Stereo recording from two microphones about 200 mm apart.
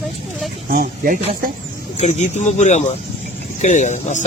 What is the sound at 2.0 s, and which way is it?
A man's voice, 35° left (ahead or behind).